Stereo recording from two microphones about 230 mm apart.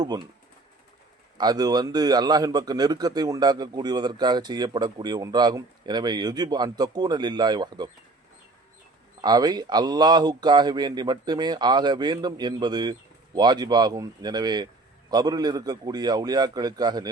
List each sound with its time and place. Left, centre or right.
1.4 s a man's voice: centre
9.2 s a man's voice: centre